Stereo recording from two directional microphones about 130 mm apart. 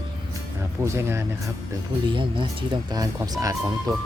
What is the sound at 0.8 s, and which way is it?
Speech, 20° right (ahead or behind).